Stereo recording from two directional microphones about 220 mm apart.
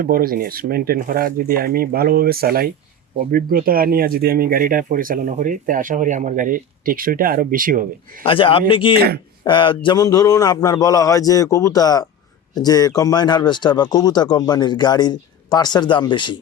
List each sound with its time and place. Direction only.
0.0 s speech: 40° right (ahead or behind)
8.2 s speech: 25° left (ahead or behind)
9.0 s speech: 45° right (ahead or behind)
9.4 s a man's voice: 20° left (ahead or behind)